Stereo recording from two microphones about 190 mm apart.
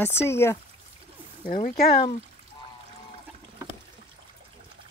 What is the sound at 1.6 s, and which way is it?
Speech, 55° left (ahead or behind).